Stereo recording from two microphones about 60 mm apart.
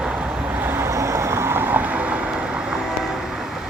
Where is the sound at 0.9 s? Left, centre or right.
Right.